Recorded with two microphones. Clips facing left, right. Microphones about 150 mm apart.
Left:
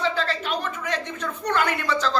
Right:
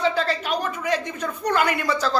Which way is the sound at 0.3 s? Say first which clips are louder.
Right 2 dB; 10° right (ahead or behind).